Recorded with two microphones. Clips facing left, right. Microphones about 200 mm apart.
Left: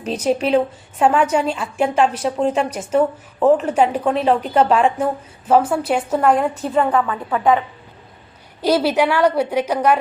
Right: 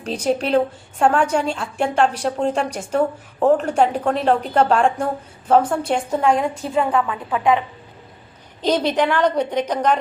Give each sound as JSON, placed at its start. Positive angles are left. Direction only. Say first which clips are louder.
{"t": 0.0, "sound": "a woman's voice", "louder": "left 2 dB", "side_deg": 5}
{"t": 6.5, "sound": "a woman's voice", "louder": "left 2 dB", "side_deg": -5}
{"t": 8.6, "sound": "a woman's voice", "louder": "left 2 dB", "side_deg": 5}